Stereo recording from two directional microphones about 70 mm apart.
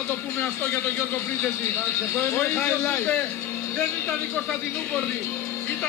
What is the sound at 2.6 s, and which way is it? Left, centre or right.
Speech, left.